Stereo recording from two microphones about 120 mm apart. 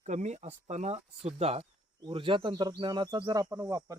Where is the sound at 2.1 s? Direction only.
45° right (ahead or behind); by 4.0 s 25° right (ahead or behind).